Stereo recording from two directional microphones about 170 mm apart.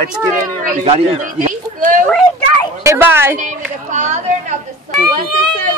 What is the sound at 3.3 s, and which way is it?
Speech, 45° right (ahead or behind).